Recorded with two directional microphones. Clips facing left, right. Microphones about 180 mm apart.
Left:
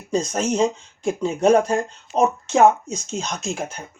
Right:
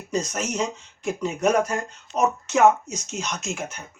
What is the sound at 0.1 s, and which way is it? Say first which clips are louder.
Speech: left 5 dB; 30° left (ahead or behind).